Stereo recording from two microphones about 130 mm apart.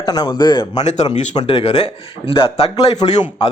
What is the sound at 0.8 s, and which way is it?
A man's voice, 60° left (ahead or behind).